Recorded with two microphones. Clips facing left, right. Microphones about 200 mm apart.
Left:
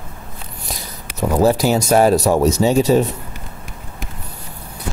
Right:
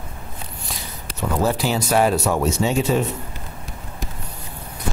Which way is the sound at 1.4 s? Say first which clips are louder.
Left 7 dB; 40° left (ahead or behind).